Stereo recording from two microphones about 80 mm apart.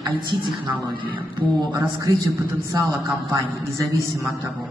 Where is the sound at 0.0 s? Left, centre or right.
Right.